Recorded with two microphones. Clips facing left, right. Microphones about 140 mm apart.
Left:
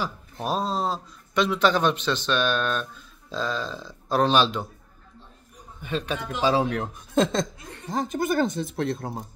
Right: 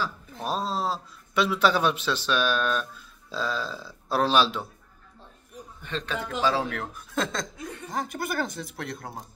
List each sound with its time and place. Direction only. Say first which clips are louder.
0.4 s speech: left 2 dB; centre (ahead or behind)
5.8 s speech: left 3 dB; 10° left (ahead or behind); by 9.2 s 25° left (ahead or behind)